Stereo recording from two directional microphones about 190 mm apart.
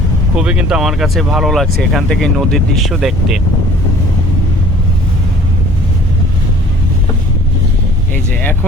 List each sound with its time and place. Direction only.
0.3 s speech: 5° right (ahead or behind)